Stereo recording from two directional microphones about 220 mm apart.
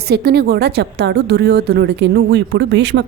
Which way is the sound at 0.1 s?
45° right (ahead or behind).